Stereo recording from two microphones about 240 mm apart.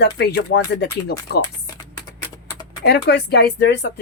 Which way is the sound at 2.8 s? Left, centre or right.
Left.